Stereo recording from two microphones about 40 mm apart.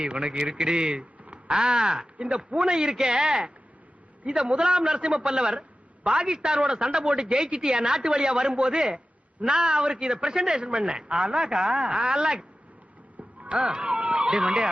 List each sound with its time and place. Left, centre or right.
0.0 s a man's voice: right
13.4 s a man's voice: right